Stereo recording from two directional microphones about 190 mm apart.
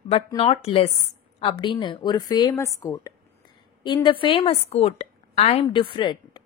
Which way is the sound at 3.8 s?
25° left (ahead or behind).